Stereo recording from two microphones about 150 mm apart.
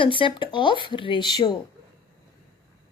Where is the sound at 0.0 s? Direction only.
35° left (ahead or behind).